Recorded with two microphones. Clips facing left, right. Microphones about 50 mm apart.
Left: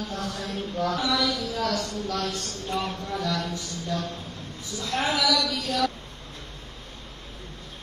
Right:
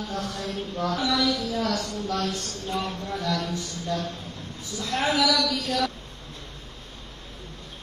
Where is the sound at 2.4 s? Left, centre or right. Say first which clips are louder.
Even; left.